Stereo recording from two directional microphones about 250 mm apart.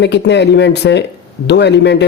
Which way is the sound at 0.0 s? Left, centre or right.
Left.